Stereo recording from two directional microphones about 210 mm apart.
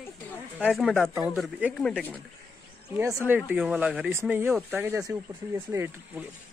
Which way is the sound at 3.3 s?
5° right (ahead or behind).